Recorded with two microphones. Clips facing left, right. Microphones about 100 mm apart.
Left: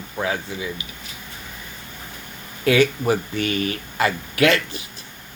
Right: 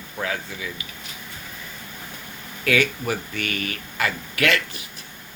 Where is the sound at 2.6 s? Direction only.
25° left (ahead or behind).